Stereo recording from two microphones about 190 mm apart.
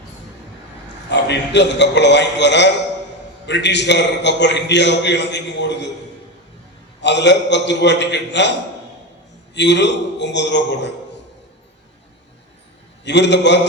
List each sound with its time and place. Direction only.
1.1 s a man's voice: 65° left (ahead or behind)
7.0 s a man's voice: 65° left (ahead or behind)
9.6 s a man's voice: 65° left (ahead or behind)
13.1 s a man's voice: 65° left (ahead or behind)